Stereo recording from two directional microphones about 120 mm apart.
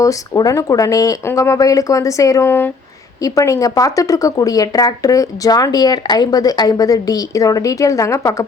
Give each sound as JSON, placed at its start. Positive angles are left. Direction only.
{"t": 0.0, "sound": "speech", "side_deg": 30}
{"t": 3.2, "sound": "speech", "side_deg": 30}